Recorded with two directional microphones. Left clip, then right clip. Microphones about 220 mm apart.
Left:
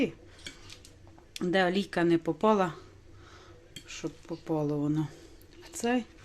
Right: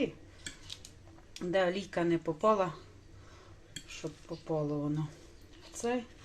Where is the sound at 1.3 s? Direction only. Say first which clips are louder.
Left 3 dB; 35° left (ahead or behind).